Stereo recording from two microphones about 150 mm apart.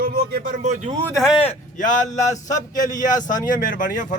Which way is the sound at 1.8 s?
60° left (ahead or behind).